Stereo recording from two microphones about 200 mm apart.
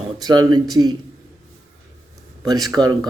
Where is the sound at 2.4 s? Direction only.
20° right (ahead or behind).